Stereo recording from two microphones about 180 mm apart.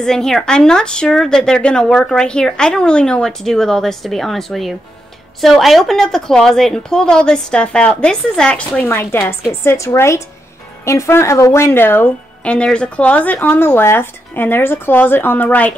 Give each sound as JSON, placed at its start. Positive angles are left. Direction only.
{"t": 0.0, "sound": "a woman's voice", "side_deg": 5}